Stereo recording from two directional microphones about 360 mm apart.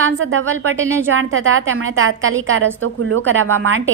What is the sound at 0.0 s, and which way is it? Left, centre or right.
A woman's voice, right.